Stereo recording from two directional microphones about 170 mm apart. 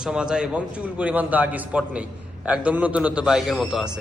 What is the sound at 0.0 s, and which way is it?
A man's voice, 5° right (ahead or behind).